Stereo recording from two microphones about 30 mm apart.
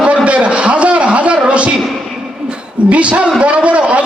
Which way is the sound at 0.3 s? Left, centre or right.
Right.